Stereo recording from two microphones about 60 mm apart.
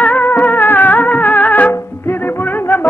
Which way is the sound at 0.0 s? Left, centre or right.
Left.